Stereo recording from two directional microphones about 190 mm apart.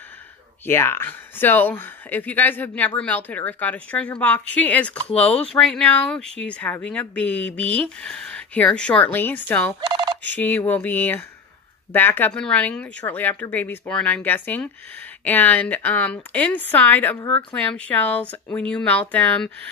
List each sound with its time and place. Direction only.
0.7 s speech: 10° left (ahead or behind)
9.8 s a sound: 25° right (ahead or behind)
10.2 s speech: 10° left (ahead or behind)